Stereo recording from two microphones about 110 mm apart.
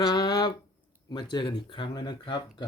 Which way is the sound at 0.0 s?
40° left (ahead or behind).